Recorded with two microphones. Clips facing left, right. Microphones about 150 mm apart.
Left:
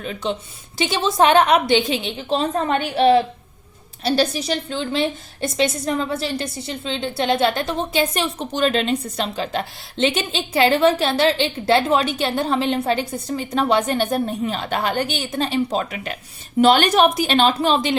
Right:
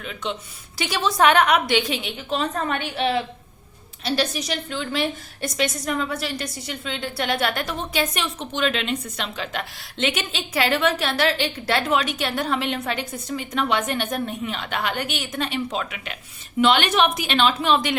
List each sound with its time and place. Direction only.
0.0 s a woman's voice: 35° left (ahead or behind)
0.8 s a woman's voice: 25° left (ahead or behind)
2.7 s a woman's voice: 40° left (ahead or behind)